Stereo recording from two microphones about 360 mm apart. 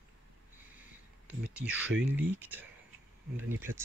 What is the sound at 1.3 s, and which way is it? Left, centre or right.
Speech, centre.